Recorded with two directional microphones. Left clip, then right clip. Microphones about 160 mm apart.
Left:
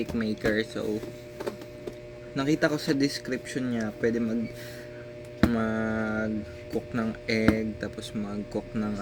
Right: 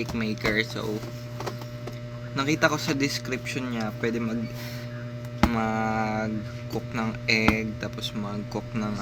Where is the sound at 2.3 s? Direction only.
15° left (ahead or behind).